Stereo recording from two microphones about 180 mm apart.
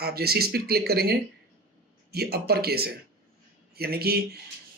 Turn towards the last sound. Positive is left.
turn(degrees=-60)  # may be behind; listen again after turning